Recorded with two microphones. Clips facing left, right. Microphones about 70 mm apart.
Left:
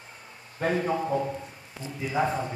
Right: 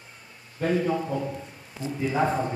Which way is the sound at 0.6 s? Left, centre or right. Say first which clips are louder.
Right 1 dB; left.